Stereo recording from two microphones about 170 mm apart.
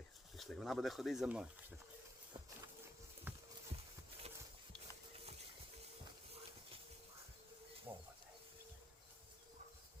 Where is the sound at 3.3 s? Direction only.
10° right (ahead or behind).